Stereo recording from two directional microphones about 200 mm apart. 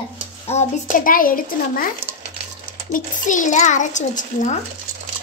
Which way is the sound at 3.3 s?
40° left (ahead or behind).